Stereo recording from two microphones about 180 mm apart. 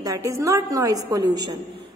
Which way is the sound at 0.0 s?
20° right (ahead or behind).